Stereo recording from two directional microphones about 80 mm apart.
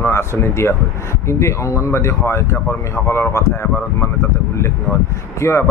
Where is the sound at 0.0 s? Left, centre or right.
Left.